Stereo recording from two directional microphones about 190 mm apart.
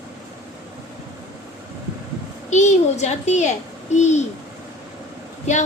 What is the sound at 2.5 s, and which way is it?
Child singing, 40° left (ahead or behind).